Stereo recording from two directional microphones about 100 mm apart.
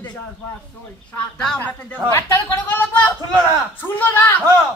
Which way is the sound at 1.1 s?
10° left (ahead or behind).